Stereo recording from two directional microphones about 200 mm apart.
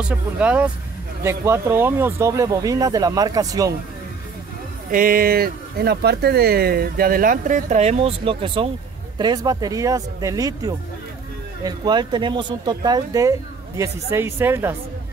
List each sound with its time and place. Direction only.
0.0 s speech: 5° right (ahead or behind)
4.9 s speech: 45° right (ahead or behind); by 14.8 s 10° right (ahead or behind)